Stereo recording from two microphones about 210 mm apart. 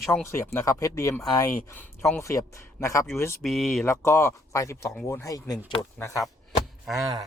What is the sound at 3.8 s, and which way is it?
Speech, 15° left (ahead or behind).